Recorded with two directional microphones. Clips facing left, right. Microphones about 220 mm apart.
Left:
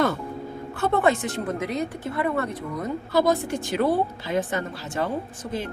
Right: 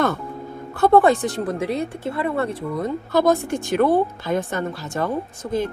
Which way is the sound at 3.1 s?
50° right (ahead or behind).